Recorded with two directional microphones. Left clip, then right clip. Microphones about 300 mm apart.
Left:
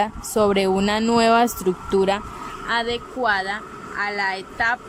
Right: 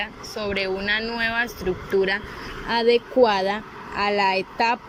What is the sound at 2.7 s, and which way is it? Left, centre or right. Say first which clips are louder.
Speech: right 4 dB; centre.